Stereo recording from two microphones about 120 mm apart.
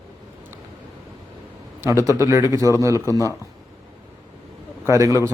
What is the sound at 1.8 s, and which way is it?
A man's voice, 25° right (ahead or behind).